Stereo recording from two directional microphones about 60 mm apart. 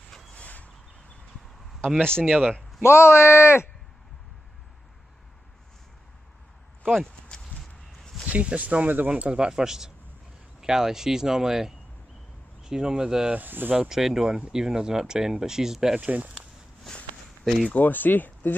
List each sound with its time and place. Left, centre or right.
0.3 s a sound: left
2.0 s speech: centre
2.2 s speech: right
2.8 s speech: left
7.2 s walk: centre
8.3 s speech: right
9.1 s speech: centre
13.4 s speech: right
13.7 s speech: centre
16.0 s speech: right
17.6 s speech: left